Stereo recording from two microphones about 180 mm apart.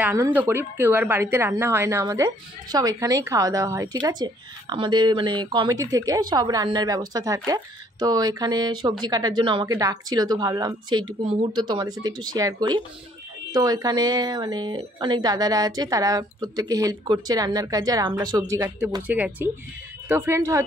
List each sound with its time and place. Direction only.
0.0 s speech: 10° right (ahead or behind)
19.0 s speech: 10° right (ahead or behind)